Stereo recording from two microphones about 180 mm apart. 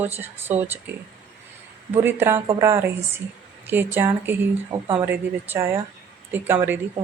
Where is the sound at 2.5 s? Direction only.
15° right (ahead or behind).